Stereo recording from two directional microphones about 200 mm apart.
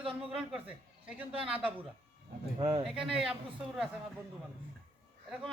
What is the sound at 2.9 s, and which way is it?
A man's voice, 5° right (ahead or behind).